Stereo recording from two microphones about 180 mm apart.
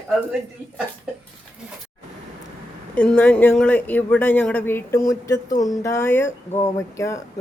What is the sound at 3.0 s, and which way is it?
Speech, 10° left (ahead or behind).